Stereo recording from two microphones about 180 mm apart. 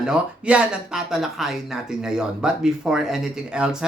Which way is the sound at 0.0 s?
5° right (ahead or behind).